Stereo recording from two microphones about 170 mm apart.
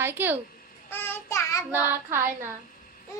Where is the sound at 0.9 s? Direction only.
10° left (ahead or behind).